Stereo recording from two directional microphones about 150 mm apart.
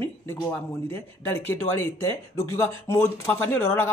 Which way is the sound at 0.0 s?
15° left (ahead or behind).